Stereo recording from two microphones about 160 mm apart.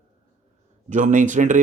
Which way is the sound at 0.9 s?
50° right (ahead or behind).